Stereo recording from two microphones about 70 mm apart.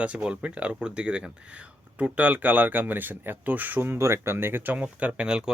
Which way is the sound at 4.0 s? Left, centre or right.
Right.